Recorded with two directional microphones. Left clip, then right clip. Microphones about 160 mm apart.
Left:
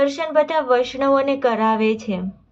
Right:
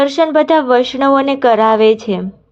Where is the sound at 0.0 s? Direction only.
40° right (ahead or behind).